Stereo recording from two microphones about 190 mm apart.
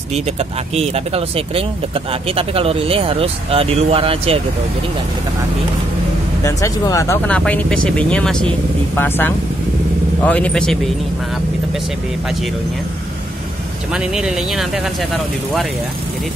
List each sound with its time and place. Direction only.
0.7 s speech: 30° right (ahead or behind)
6.4 s speech: 15° left (ahead or behind)
13.9 s speech: 5° right (ahead or behind)